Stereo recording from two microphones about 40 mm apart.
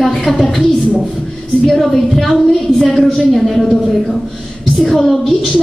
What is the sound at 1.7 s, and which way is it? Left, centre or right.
A woman's voice, centre.